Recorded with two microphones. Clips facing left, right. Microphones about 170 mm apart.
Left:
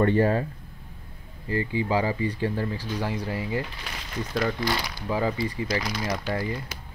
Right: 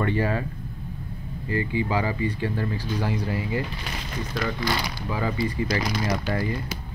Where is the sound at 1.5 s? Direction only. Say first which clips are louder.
Even; 35° left (ahead or behind).